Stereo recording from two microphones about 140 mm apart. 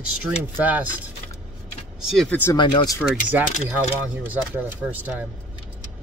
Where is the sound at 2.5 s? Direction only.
30° left (ahead or behind).